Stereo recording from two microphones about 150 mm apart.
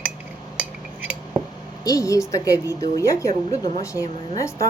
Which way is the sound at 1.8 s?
25° left (ahead or behind).